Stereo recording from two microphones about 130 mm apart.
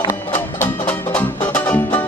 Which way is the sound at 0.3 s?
10° left (ahead or behind).